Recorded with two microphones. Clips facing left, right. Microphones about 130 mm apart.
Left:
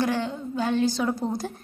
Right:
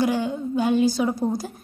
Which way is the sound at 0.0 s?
10° right (ahead or behind).